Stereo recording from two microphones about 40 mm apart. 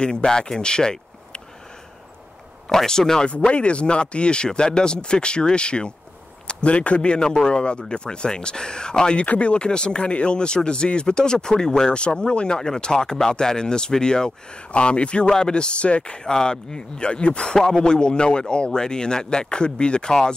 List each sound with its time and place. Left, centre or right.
0.0 s speech: left
2.7 s speech: centre
3.3 s speech: left
14.7 s speech: left
15.2 s speech: centre
17.6 s speech: centre